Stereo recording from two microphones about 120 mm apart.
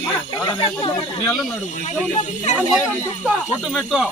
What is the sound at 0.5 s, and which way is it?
Speech, 45° left (ahead or behind).